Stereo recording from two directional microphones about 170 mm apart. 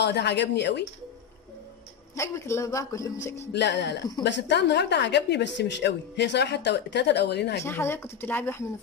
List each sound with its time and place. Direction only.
0.0 s a woman's voice: 80° left
2.1 s a man's voice: 15° left (ahead or behind)
3.5 s speech: 90° left
7.6 s a man's voice: 15° left (ahead or behind)